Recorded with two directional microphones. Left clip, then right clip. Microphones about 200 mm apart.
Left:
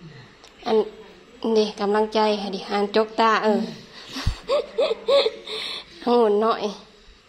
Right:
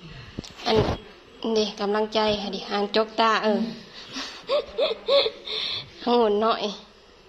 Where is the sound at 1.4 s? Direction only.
20° left (ahead or behind).